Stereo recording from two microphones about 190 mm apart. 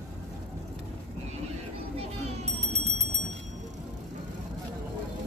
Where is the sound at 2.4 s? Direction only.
35° right (ahead or behind).